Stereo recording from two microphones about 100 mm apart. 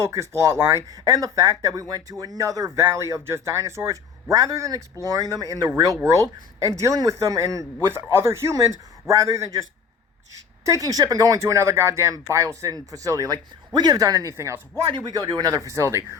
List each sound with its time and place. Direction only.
0.0 s speech: 30° right (ahead or behind)
14.8 s speech: 50° right (ahead or behind); by 16.0 s 30° right (ahead or behind)